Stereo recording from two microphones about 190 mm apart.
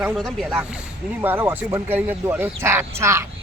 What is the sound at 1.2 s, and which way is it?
Speech, 10° right (ahead or behind).